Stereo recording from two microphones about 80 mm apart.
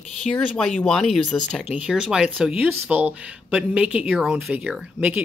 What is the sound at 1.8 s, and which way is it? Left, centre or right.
Speech, centre.